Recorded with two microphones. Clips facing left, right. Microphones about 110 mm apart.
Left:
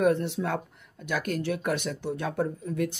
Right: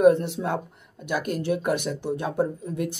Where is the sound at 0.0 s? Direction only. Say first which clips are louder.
Right 6 dB; 20° right (ahead or behind).